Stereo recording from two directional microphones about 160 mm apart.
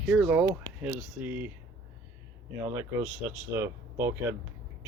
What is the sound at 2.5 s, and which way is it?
Speech, 15° right (ahead or behind).